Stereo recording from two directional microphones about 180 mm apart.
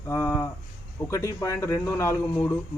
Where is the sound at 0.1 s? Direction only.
15° left (ahead or behind).